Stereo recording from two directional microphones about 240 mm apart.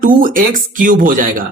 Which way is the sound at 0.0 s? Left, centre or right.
Right.